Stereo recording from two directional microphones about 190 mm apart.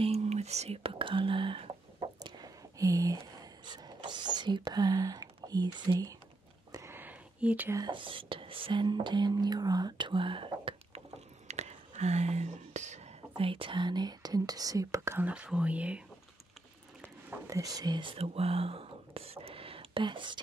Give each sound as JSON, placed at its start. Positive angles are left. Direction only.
{"t": 0.0, "sound": "speech", "side_deg": -35}
{"t": 2.2, "sound": "a sound", "side_deg": -20}
{"t": 3.6, "sound": "speech", "side_deg": -25}
{"t": 6.7, "sound": "whispering", "side_deg": -15}
{"t": 7.8, "sound": "speech", "side_deg": -25}
{"t": 17.0, "sound": "whispering", "side_deg": -15}